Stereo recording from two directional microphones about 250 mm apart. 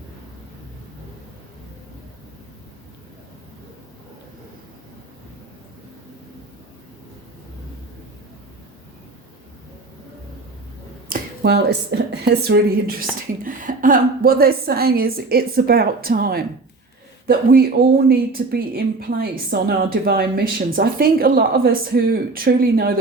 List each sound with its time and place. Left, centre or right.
11.1 s a woman's voice: right